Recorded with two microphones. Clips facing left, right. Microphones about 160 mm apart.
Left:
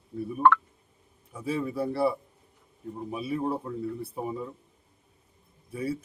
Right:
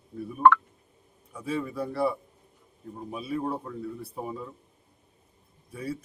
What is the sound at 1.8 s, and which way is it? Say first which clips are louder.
Speech: left 2 dB; 5° left (ahead or behind).